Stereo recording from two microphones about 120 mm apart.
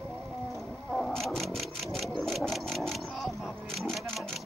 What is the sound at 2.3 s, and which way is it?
Vehicle, centre (ahead or behind).